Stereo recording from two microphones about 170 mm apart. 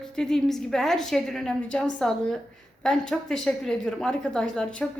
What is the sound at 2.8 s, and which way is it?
A woman's voice, 5° left (ahead or behind).